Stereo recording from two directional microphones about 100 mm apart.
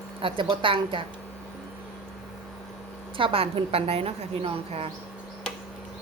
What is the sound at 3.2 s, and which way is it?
Speech, 65° right (ahead or behind).